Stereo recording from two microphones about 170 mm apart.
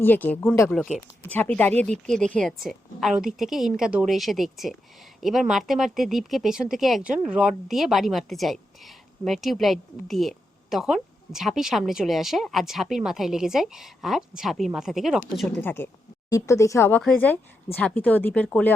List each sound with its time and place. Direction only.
0.0 s speech: 10° left (ahead or behind)
0.7 s a woman's voice: centre (ahead or behind)